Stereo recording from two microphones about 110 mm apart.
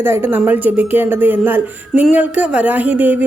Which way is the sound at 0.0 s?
20° right (ahead or behind).